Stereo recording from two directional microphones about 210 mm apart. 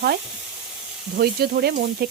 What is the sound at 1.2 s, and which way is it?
Speech, 50° right (ahead or behind).